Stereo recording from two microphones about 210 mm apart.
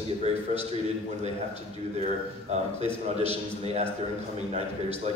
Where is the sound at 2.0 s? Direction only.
30° right (ahead or behind).